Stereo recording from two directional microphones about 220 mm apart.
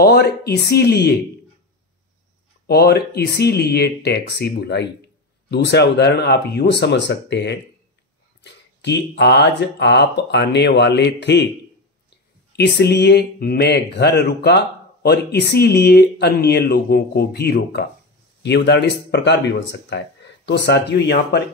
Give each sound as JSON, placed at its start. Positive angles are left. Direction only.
{"t": 0.0, "sound": "speech", "side_deg": 50}
{"t": 2.6, "sound": "speech", "side_deg": 45}
{"t": 8.8, "sound": "speech", "side_deg": 50}
{"t": 12.5, "sound": "speech", "side_deg": 50}